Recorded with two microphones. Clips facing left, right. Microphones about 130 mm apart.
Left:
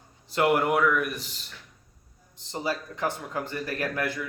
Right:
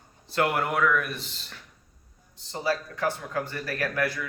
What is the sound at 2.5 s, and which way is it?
A man's voice, 20° left (ahead or behind).